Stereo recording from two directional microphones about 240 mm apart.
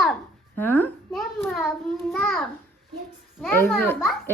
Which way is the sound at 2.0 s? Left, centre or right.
Centre.